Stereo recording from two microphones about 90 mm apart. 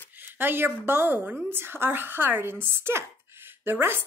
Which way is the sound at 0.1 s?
20° right (ahead or behind).